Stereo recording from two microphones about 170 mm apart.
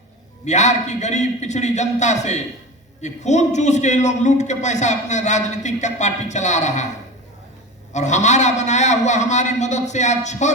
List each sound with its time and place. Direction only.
0.4 s a man's voice: 45° left (ahead or behind)
7.9 s a man's voice: 45° left (ahead or behind)